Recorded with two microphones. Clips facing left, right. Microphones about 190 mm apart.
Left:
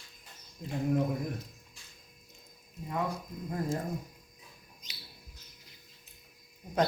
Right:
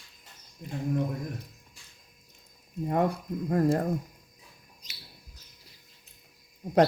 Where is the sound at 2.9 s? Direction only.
60° right (ahead or behind).